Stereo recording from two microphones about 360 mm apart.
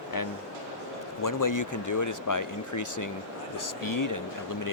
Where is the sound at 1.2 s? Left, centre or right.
Left.